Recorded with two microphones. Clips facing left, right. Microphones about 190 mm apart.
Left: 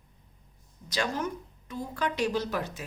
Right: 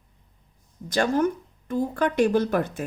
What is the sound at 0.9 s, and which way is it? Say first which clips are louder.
Speech: right 9 dB; 55° right (ahead or behind).